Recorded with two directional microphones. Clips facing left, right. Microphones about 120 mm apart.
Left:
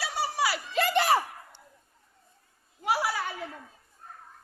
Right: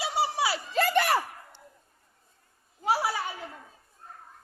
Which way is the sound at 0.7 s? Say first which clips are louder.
Right 1 dB; 45° right (ahead or behind).